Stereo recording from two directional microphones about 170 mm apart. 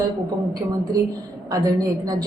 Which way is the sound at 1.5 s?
20° right (ahead or behind).